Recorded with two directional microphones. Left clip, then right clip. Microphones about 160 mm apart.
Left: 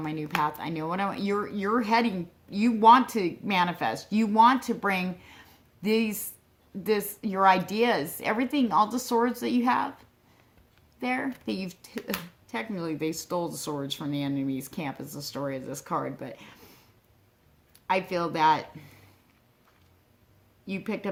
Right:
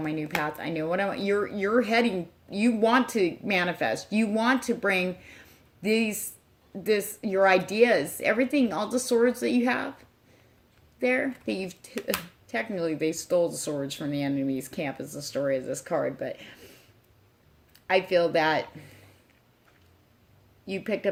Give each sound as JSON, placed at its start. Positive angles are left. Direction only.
{"t": 0.0, "sound": "speech", "side_deg": 30}
{"t": 11.1, "sound": "speech", "side_deg": 30}
{"t": 17.9, "sound": "speech", "side_deg": 25}
{"t": 20.7, "sound": "speech", "side_deg": 25}